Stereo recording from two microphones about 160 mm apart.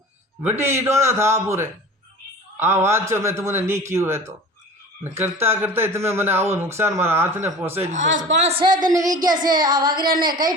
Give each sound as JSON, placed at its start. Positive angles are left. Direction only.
{"t": 0.5, "sound": "speech", "side_deg": -15}
{"t": 8.4, "sound": "speech", "side_deg": -40}